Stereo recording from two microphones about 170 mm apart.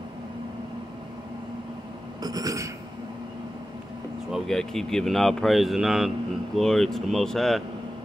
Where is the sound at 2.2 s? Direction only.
20° right (ahead or behind).